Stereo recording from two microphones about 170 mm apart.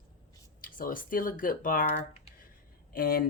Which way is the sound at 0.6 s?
55° left (ahead or behind).